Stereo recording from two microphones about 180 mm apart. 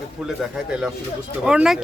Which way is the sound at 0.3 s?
5° right (ahead or behind).